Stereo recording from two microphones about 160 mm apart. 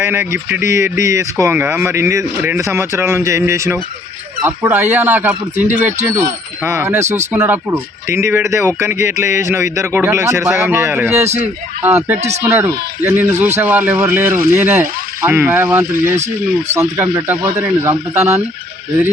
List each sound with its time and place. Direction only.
0.0 s speech: 15° right (ahead or behind)